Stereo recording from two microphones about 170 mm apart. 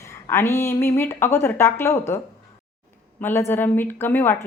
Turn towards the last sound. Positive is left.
turn(degrees=10)  # may be behind; listen again after turning